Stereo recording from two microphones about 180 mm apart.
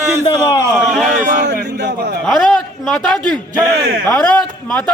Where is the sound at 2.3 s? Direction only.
5° left (ahead or behind).